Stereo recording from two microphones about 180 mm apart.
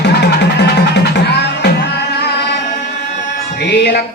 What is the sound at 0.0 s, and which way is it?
Music, 70° left (ahead or behind).